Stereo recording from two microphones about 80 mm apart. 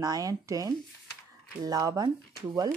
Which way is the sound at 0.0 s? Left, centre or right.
Right.